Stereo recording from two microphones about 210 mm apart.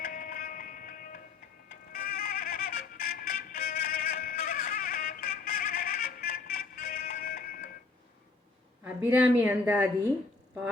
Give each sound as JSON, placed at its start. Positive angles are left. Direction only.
{"t": 0.0, "sound": "music", "side_deg": 40}
{"t": 8.8, "sound": "a woman's voice", "side_deg": -10}